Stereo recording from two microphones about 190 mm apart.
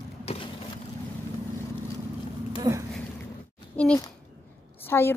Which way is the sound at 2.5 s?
20° right (ahead or behind).